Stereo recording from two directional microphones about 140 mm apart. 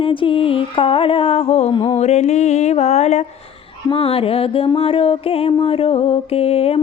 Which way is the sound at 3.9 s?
45° left (ahead or behind).